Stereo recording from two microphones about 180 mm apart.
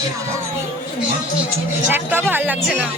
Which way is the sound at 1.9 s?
10° right (ahead or behind).